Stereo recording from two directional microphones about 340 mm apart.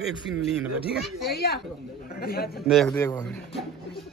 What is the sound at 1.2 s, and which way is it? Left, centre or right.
Speech, left.